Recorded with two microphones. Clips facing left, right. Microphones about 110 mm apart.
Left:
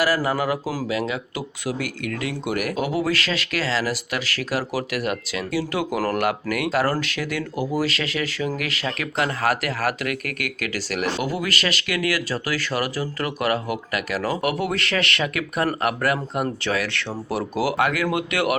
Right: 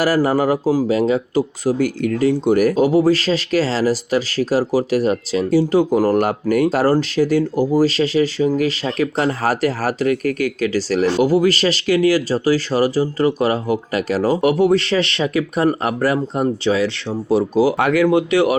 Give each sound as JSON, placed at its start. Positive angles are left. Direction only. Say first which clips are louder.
{"t": 0.0, "sound": "speech", "louder": "right 6 dB", "side_deg": -40}